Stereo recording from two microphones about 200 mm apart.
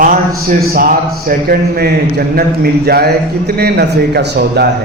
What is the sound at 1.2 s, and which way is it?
A man's voice, 50° right (ahead or behind).